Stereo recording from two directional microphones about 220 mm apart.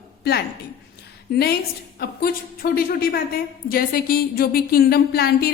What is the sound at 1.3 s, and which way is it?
A woman's voice, 45° left (ahead or behind).